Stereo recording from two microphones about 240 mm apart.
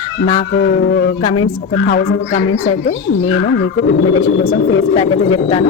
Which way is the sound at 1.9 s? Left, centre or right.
Left.